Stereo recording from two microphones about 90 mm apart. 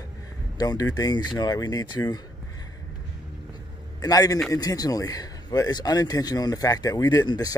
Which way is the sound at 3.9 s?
45° left (ahead or behind).